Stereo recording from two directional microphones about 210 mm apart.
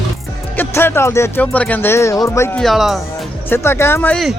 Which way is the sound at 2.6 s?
Centre (ahead or behind).